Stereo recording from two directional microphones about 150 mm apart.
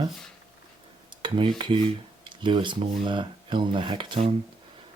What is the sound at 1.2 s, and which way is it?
Cutlery, 35° right (ahead or behind).